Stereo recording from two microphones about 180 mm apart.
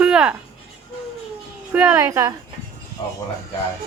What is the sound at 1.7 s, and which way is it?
Speech, 10° right (ahead or behind).